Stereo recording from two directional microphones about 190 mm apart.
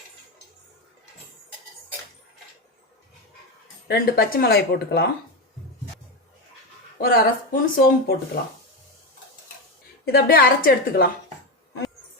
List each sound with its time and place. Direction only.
3.8 s speech: 55° left (ahead or behind)
7.0 s speech: 50° left (ahead or behind)
10.1 s speech: 55° left (ahead or behind)